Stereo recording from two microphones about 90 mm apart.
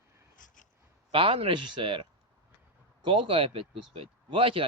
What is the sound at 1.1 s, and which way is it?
Speech, 85° right.